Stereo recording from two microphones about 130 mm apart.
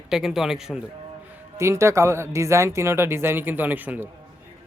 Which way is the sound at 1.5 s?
20° right (ahead or behind).